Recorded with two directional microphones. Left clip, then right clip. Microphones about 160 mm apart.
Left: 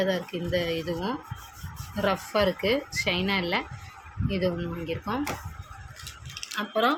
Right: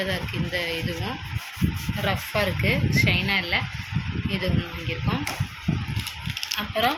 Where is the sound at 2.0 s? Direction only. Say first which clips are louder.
Left 1 dB; 70° left (ahead or behind); by 3.6 s 90° left.